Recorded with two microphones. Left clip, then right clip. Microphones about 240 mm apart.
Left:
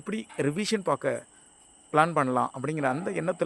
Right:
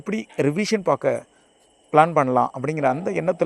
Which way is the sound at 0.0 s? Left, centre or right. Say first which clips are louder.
Right 7 dB; centre.